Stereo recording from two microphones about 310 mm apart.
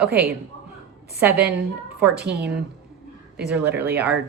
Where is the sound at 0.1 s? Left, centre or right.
Right.